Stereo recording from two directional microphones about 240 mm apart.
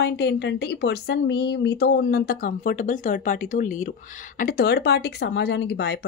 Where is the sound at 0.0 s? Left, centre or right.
Left.